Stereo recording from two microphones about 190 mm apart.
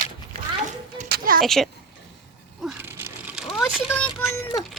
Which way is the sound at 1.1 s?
50° right (ahead or behind).